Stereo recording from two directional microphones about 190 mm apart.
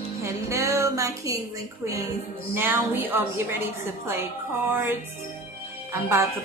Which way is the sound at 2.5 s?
10° right (ahead or behind).